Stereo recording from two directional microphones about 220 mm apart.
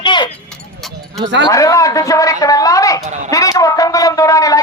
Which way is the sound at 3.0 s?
30° right (ahead or behind).